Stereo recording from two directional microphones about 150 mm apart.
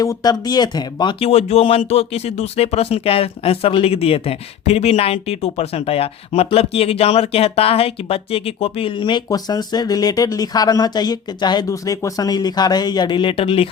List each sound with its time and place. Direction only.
0.0 s speech: 25° left (ahead or behind)
1.2 s speech: 45° left (ahead or behind)